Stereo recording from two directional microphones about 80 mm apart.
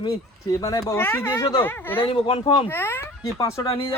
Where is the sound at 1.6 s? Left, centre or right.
Left.